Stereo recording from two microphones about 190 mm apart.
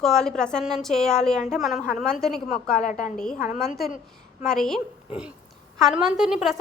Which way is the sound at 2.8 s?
45° left (ahead or behind).